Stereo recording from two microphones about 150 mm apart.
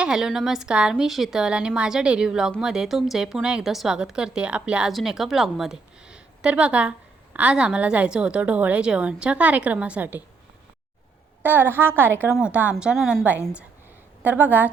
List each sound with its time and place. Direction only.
0.0 s a woman's voice: 5° right (ahead or behind)
11.4 s a woman's voice: 10° right (ahead or behind)